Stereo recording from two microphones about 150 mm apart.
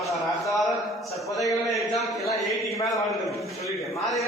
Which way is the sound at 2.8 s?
20° left (ahead or behind).